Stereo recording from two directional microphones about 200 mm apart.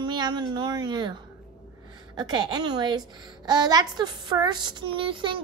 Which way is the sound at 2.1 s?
20° right (ahead or behind).